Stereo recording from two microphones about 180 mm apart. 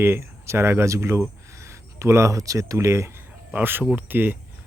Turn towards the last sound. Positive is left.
turn(degrees=-10)  # may be behind; listen again after turning